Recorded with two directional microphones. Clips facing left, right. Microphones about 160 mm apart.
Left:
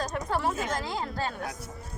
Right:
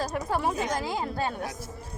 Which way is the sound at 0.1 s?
5° right (ahead or behind).